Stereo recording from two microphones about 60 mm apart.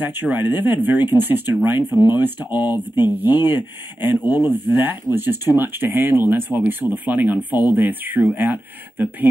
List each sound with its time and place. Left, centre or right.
0.1 s speech: right